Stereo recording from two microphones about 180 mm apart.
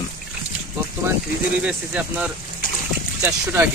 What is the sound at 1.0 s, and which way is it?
Speech, 15° right (ahead or behind).